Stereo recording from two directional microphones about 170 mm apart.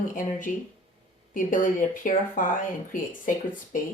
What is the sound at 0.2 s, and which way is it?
Speech, 50° left (ahead or behind).